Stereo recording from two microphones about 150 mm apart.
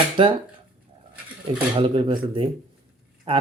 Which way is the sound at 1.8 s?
35° right (ahead or behind).